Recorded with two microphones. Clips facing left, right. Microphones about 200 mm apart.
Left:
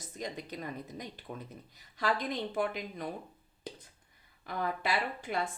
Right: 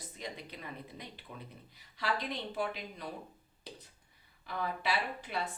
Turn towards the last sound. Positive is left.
turn(degrees=50)  # may be behind; listen again after turning